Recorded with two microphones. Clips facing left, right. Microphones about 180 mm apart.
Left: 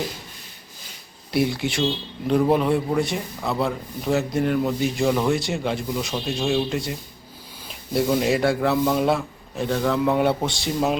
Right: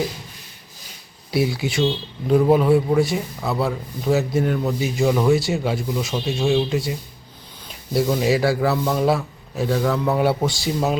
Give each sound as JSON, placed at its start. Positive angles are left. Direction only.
{"t": 1.3, "sound": "a man's voice", "side_deg": 0}